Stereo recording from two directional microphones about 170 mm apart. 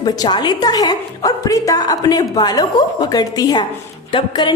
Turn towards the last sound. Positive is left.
turn(degrees=25)  # may be behind; listen again after turning